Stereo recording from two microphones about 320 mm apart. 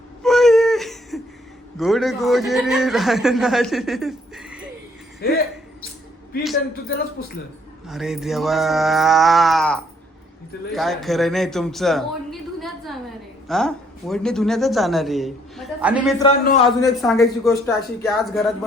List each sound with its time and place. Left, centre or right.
0.2 s baby cry: centre
1.8 s speech: centre
6.8 s a man's voice: left
7.9 s speech: centre
16.4 s a man's voice: left
17.0 s speech: centre